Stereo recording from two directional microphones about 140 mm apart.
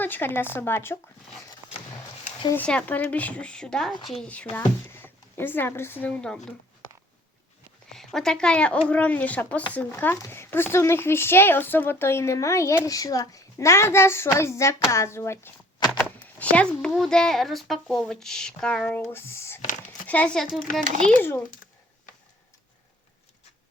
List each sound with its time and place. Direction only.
0.0 s speech: 15° left (ahead or behind)
2.6 s speech: 10° left (ahead or behind)
7.9 s speech: 5° left (ahead or behind); by 15.9 s 20° left (ahead or behind)
15.9 s speech: 10° left (ahead or behind)